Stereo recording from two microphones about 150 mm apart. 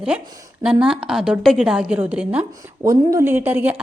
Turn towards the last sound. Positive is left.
turn(degrees=-10)  # may be behind; listen again after turning